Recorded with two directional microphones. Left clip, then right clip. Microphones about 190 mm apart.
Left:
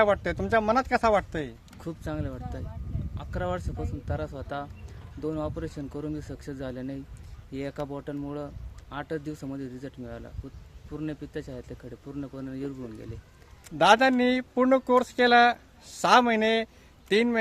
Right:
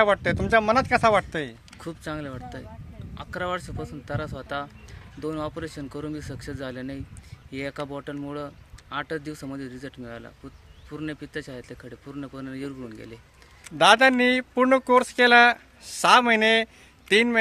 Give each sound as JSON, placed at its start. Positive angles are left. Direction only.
{"t": 0.0, "sound": "speech", "side_deg": -25}
{"t": 1.8, "sound": "speech", "side_deg": 0}
{"t": 13.7, "sound": "speech", "side_deg": -20}